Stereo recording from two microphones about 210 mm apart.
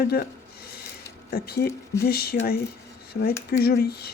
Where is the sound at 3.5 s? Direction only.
50° left (ahead or behind).